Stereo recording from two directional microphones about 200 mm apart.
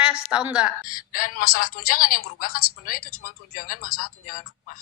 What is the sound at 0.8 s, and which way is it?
A man's voice, 45° left (ahead or behind).